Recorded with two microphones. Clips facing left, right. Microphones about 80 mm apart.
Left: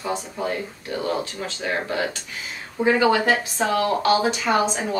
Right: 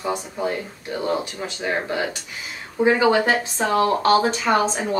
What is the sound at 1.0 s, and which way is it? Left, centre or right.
Speech, right.